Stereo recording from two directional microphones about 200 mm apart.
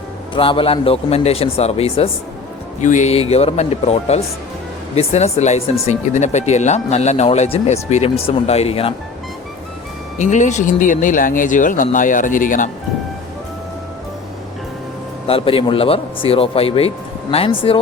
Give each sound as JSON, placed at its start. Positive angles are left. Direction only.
{"t": 0.3, "sound": "a man's voice", "side_deg": 25}
{"t": 10.2, "sound": "speech", "side_deg": 35}
{"t": 15.3, "sound": "a man's voice", "side_deg": 30}